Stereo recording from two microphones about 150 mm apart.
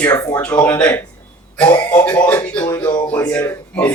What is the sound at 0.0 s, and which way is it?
Speech, 15° left (ahead or behind).